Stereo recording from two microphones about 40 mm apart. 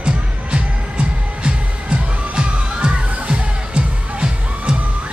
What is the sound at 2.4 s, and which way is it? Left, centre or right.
Music, right.